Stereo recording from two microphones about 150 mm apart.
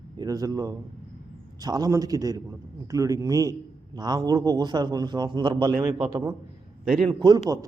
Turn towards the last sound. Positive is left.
turn(degrees=-30)  # may be behind; listen again after turning